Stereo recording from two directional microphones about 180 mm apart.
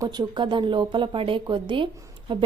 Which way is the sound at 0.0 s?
20° right (ahead or behind).